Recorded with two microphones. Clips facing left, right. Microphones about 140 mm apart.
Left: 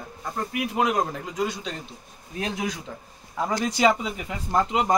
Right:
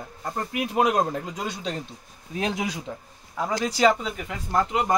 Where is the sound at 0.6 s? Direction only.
30° right (ahead or behind).